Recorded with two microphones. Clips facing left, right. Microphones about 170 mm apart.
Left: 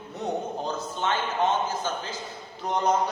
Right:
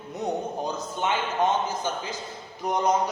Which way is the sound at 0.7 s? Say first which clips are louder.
Even; 15° right (ahead or behind).